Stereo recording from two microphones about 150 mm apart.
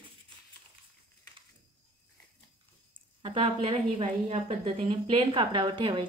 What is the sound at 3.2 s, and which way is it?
A woman's voice, 40° right (ahead or behind).